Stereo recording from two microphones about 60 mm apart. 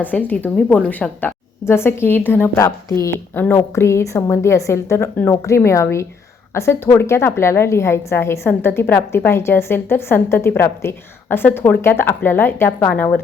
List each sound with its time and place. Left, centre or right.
0.0 s speech: left
1.6 s a woman's voice: left
2.6 s a woman's voice: left
5.3 s a woman's voice: left